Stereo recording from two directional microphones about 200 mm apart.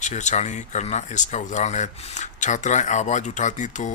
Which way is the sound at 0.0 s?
35° left (ahead or behind).